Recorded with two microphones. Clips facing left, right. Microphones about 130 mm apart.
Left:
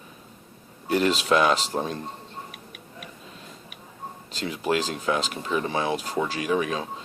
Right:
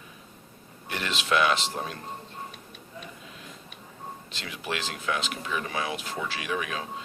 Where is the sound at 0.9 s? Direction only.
40° left (ahead or behind).